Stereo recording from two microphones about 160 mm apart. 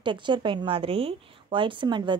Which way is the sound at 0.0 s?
30° right (ahead or behind).